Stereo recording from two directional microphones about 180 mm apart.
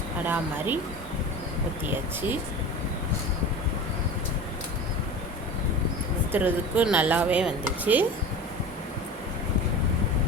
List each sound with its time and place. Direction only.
0.3 s speech: 10° right (ahead or behind)
6.3 s speech: 10° right (ahead or behind)